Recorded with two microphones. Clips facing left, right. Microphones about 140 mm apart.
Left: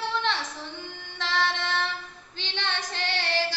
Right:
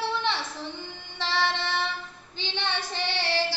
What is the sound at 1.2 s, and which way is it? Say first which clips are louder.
Music: even; 15° right (ahead or behind).